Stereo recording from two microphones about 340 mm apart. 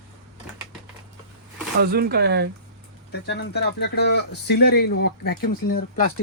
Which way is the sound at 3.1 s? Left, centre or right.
Left.